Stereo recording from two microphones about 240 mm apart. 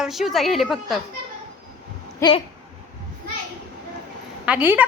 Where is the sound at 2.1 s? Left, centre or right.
Centre.